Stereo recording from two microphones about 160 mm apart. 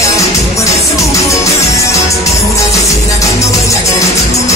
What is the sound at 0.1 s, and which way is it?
Music, 20° left (ahead or behind).